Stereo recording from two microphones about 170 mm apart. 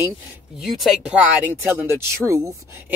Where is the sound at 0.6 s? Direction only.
Centre (ahead or behind).